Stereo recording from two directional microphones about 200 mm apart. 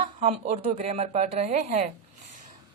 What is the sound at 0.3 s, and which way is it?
Speech, 35° right (ahead or behind).